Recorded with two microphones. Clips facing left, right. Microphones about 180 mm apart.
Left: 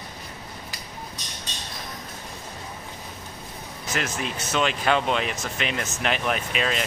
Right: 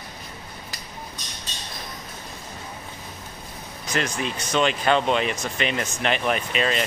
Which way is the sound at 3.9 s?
5° left (ahead or behind).